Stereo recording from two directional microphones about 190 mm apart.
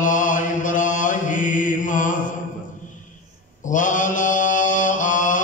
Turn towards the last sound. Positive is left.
turn(degrees=45)  # may be behind; listen again after turning